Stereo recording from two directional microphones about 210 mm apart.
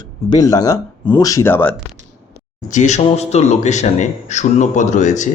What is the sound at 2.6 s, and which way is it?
Speech, 35° left (ahead or behind).